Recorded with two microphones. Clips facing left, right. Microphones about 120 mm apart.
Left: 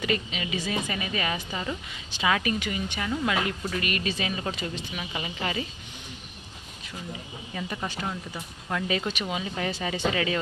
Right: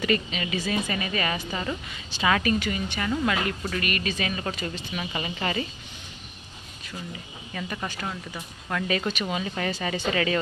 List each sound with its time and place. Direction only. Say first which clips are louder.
0.0 s speech: right 3 dB; 15° left (ahead or behind)
7.5 s speech: even; 15° left (ahead or behind)